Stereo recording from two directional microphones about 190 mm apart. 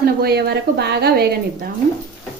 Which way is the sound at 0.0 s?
55° right (ahead or behind).